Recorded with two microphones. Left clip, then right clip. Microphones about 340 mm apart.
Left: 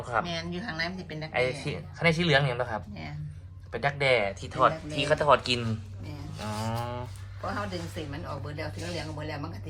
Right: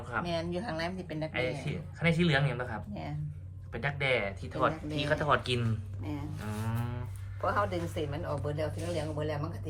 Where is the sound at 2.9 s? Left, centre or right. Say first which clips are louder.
Right 1 dB; right.